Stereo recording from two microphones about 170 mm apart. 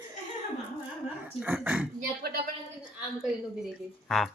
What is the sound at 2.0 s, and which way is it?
Speech, 60° right (ahead or behind).